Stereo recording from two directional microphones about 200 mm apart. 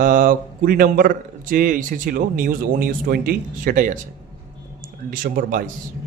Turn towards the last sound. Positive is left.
turn(degrees=-45)  # may be behind; listen again after turning